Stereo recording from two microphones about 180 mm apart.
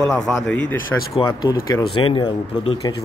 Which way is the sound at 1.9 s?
30° left (ahead or behind).